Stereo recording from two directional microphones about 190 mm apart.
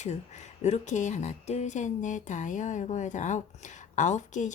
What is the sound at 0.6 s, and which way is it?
Speech, 40° left (ahead or behind).